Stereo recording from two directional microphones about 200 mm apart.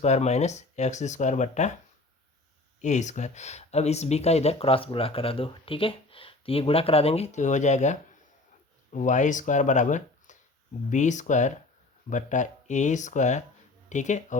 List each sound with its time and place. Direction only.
0.0 s speech: 35° left (ahead or behind)
2.8 s speech: 35° left (ahead or behind)